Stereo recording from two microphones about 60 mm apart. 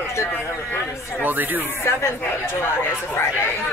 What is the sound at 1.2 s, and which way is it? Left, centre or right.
Speech, right.